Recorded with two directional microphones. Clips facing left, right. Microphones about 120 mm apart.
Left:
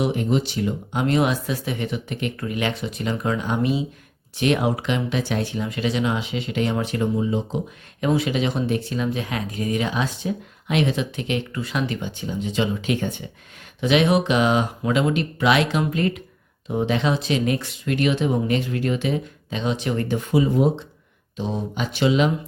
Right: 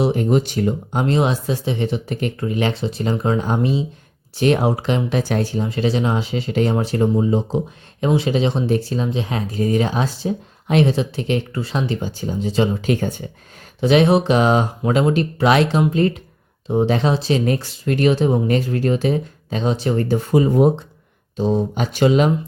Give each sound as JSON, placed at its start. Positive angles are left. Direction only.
{"t": 0.0, "sound": "speech", "side_deg": -40}
{"t": 1.0, "sound": "speech", "side_deg": -30}